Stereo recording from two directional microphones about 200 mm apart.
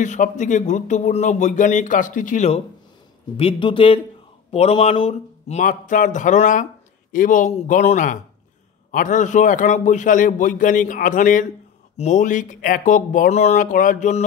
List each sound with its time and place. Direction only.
0.0 s speech: 40° left (ahead or behind)